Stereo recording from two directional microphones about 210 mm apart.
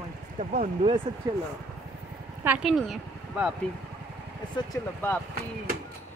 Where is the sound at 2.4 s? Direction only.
5° right (ahead or behind).